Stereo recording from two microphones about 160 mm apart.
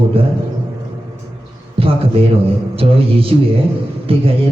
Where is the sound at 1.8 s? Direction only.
35° right (ahead or behind).